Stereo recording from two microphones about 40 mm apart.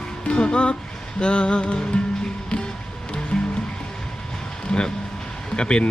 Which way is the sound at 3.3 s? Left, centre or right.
Left.